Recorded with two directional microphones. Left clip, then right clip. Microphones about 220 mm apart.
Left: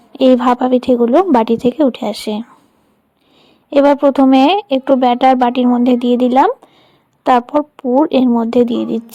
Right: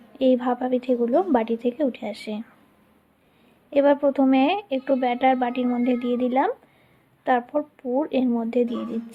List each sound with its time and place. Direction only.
0.1 s speech: 40° left (ahead or behind)
3.7 s speech: 35° left (ahead or behind)